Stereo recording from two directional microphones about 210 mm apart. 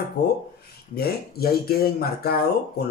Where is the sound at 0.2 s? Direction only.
55° left (ahead or behind).